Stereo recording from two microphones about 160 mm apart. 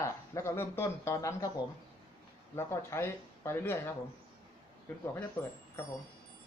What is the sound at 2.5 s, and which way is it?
Speech, 15° left (ahead or behind).